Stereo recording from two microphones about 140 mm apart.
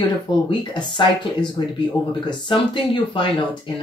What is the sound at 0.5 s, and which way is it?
Speech, 35° left (ahead or behind).